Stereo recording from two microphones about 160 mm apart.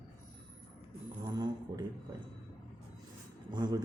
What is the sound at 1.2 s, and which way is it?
Speech, 25° right (ahead or behind).